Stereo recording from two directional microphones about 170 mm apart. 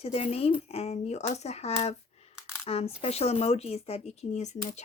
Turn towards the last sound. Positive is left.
turn(degrees=45)  # may be behind; listen again after turning